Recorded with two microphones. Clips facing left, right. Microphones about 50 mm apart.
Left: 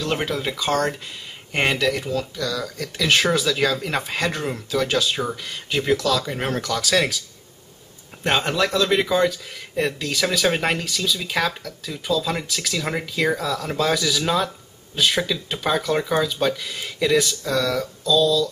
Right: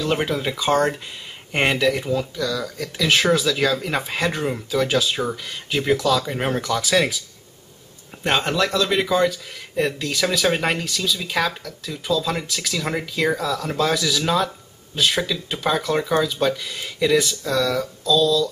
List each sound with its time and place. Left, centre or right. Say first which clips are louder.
0.0 s speech: right 2 dB; centre
8.3 s speech: even; centre